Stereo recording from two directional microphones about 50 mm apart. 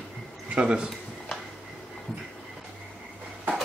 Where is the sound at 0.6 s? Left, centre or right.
Centre.